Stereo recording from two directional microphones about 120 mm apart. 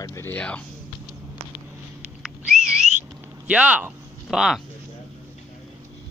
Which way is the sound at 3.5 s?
10° right (ahead or behind).